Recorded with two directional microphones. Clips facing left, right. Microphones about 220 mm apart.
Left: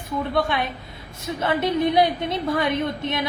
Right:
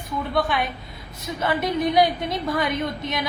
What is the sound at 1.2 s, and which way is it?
Speech, 30° left (ahead or behind).